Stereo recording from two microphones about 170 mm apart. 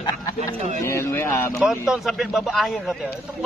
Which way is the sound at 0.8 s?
15° left (ahead or behind).